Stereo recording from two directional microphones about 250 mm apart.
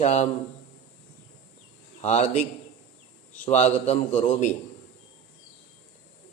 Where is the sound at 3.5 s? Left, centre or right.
Left.